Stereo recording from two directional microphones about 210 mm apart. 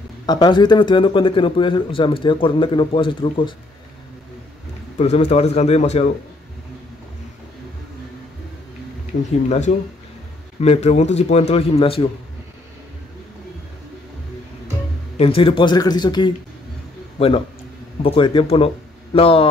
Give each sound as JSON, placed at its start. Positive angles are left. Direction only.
{"t": 0.3, "sound": "speech", "side_deg": 20}
{"t": 4.9, "sound": "a man's voice", "side_deg": 30}
{"t": 9.1, "sound": "speech", "side_deg": 50}
{"t": 9.5, "sound": "a man's voice", "side_deg": 35}
{"t": 15.1, "sound": "speech", "side_deg": 25}
{"t": 18.0, "sound": "speech", "side_deg": 25}